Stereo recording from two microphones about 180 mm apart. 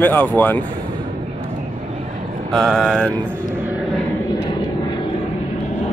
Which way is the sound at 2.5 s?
Centre (ahead or behind).